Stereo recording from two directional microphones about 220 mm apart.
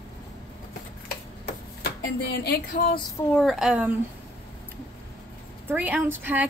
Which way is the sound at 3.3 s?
Centre (ahead or behind).